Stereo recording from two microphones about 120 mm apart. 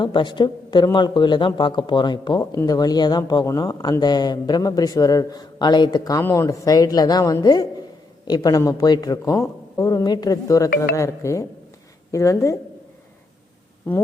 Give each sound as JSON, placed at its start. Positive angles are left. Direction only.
{"t": 0.0, "sound": "speech", "side_deg": 40}